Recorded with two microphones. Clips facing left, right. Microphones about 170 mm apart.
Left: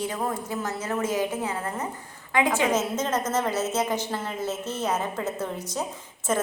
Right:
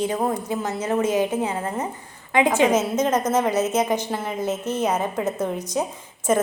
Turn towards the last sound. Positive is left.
turn(degrees=-15)  # may be behind; listen again after turning